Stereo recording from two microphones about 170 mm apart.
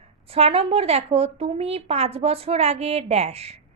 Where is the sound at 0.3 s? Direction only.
35° right (ahead or behind).